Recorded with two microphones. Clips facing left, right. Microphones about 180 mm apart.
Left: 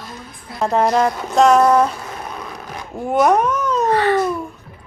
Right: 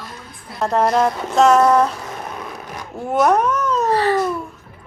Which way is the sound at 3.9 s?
35° right (ahead or behind).